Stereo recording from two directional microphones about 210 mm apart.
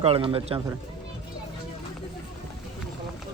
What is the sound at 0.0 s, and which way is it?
Speech, 25° right (ahead or behind).